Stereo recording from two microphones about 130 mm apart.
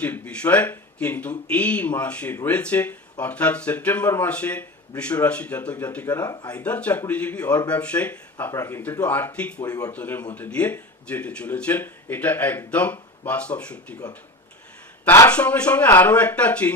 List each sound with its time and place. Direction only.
0.0 s speech: 10° left (ahead or behind)
6.2 s speech: 30° left (ahead or behind)
6.5 s speech: 10° left (ahead or behind)
8.5 s speech: 25° left (ahead or behind)
9.0 s speech: 10° left (ahead or behind)
9.6 s speech: 30° left (ahead or behind)
9.9 s speech: 15° left (ahead or behind)
15.0 s speech: 15° left (ahead or behind)